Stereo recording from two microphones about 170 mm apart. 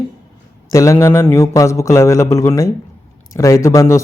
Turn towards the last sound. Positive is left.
turn(degrees=15)  # may be behind; listen again after turning